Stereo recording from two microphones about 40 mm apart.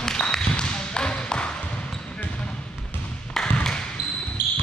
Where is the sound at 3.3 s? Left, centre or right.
Centre.